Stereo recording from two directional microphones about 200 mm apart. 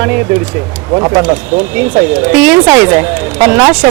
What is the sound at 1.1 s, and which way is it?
Speech, 5° right (ahead or behind).